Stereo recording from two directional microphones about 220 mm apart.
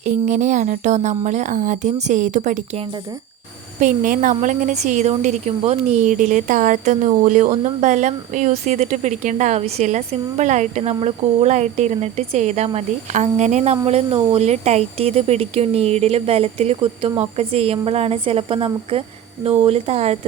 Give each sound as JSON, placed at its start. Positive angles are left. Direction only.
{"t": 0.0, "sound": "speech", "side_deg": -35}